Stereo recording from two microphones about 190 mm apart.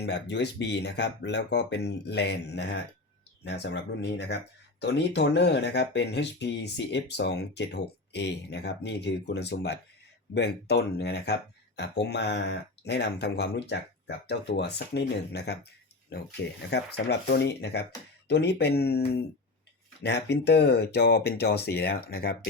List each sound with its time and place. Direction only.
0.0 s speech: 65° left (ahead or behind)